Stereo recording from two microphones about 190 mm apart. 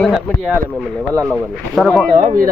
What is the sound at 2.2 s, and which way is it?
Speech, 40° right (ahead or behind).